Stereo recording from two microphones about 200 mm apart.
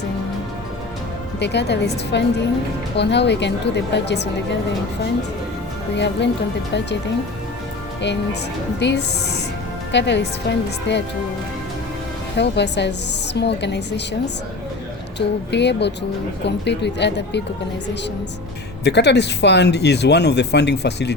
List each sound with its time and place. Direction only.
1.4 s speech: 60° left (ahead or behind)
6.0 s speech: 60° left (ahead or behind)
8.0 s speech: 60° left (ahead or behind)
12.4 s speech: 60° left (ahead or behind)
15.5 s speech: 60° left (ahead or behind)
18.9 s speech: 55° left (ahead or behind)